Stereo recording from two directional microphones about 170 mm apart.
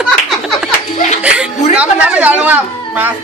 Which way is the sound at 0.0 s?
Centre (ahead or behind).